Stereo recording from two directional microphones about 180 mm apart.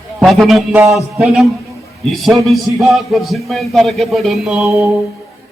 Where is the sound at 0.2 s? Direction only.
Centre (ahead or behind).